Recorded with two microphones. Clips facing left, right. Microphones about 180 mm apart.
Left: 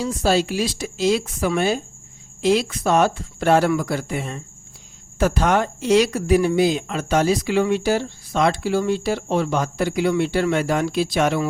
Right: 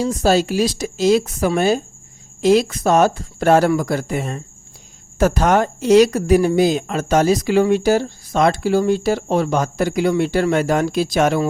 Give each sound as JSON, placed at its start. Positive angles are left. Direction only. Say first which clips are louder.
{"t": 0.0, "sound": "speech", "louder": "right 3 dB", "side_deg": -40}